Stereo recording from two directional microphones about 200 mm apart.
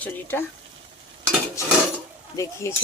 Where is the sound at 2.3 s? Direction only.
15° left (ahead or behind).